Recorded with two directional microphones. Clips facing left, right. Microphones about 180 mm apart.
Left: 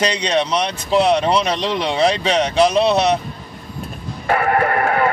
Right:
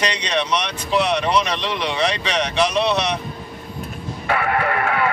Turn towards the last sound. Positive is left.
turn(degrees=45)  # may be behind; listen again after turning